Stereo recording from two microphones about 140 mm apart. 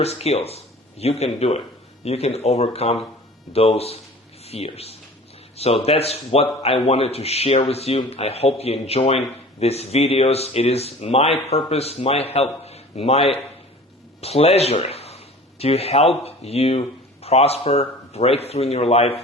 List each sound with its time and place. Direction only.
0.0 s a man's voice: 50° left (ahead or behind)